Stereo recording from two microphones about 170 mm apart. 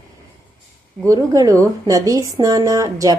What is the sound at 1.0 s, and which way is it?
A woman's voice, 20° right (ahead or behind).